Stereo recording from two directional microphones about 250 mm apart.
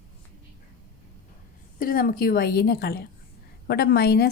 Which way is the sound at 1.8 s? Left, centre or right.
Left.